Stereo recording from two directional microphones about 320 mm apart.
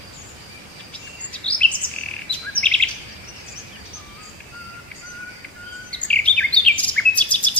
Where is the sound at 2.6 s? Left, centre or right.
Centre.